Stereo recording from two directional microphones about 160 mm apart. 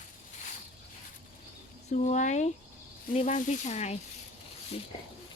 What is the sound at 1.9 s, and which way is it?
Speech, 45° left (ahead or behind).